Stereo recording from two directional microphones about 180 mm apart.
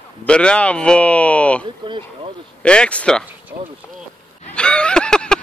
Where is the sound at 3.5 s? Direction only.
40° right (ahead or behind).